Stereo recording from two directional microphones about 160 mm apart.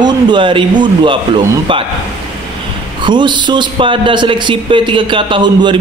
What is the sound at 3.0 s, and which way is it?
A man's voice, 30° right (ahead or behind).